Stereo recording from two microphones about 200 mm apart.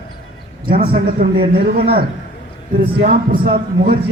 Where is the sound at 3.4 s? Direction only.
50° right (ahead or behind).